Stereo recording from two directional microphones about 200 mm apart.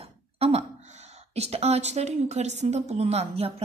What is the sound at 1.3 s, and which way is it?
A woman's voice, 30° right (ahead or behind).